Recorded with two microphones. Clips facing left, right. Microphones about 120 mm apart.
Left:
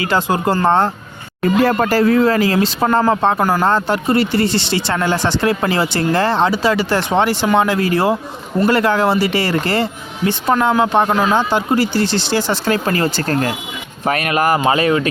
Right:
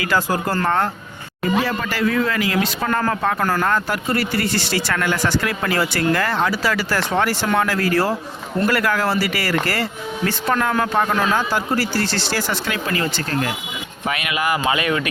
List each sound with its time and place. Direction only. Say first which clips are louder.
0.0 s speech: left 4 dB; 25° left (ahead or behind)
1.6 s speech: left 8 dB; 45° left (ahead or behind); by 12.5 s 20° left (ahead or behind)
12.6 s speech: left 6 dB; 40° left (ahead or behind)